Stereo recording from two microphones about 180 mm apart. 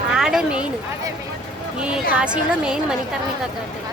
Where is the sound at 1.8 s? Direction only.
5° right (ahead or behind).